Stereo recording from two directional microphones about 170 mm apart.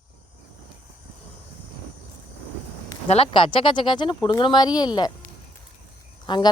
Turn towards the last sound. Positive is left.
turn(degrees=30)  # may be behind; listen again after turning